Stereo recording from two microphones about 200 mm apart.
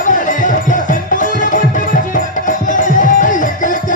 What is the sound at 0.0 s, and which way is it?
Music, 40° left (ahead or behind).